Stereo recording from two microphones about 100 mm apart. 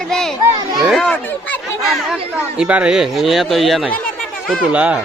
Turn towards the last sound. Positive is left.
turn(degrees=-15)  # may be behind; listen again after turning